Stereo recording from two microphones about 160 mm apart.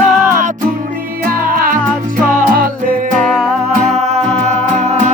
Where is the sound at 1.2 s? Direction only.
65° right (ahead or behind).